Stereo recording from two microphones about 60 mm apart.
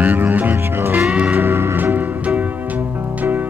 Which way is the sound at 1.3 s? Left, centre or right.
Right.